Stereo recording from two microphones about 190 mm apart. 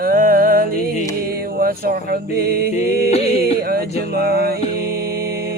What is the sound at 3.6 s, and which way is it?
Music, 50° right (ahead or behind).